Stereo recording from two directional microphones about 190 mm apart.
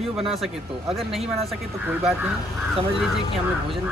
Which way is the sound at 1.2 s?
30° right (ahead or behind).